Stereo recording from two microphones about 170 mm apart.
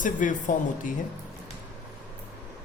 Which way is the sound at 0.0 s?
50° left (ahead or behind).